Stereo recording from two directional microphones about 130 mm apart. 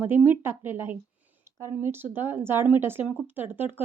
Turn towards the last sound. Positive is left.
turn(degrees=-15)  # may be behind; listen again after turning